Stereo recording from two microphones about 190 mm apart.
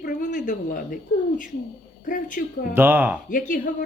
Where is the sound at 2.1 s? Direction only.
45° left (ahead or behind).